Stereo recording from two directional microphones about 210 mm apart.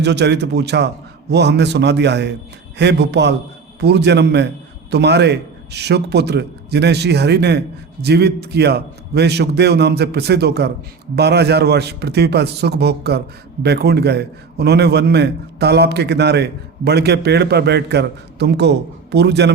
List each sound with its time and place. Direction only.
0.0 s a man's voice: 55° right (ahead or behind)